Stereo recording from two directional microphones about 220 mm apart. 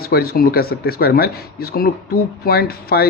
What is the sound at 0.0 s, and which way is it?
Speech, 45° left (ahead or behind).